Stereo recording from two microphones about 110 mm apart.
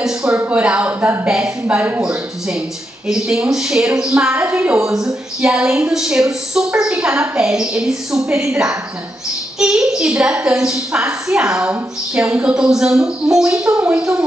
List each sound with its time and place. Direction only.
0.0 s a sound: 5° right (ahead or behind)
0.4 s a woman's voice: 10° right (ahead or behind)
4.6 s a woman's voice: 25° right (ahead or behind)
4.9 s a woman's voice: 5° right (ahead or behind)